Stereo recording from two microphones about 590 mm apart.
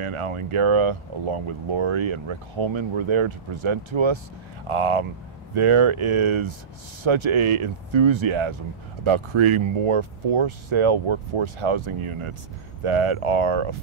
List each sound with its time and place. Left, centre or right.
0.0 s speech: right